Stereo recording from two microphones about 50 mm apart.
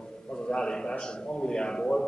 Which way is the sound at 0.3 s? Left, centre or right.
Centre.